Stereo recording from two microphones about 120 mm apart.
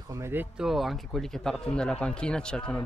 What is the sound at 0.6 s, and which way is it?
Speech, centre (ahead or behind).